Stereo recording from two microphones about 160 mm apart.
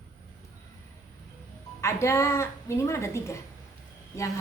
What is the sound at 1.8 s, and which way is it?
A woman's voice, 15° left (ahead or behind).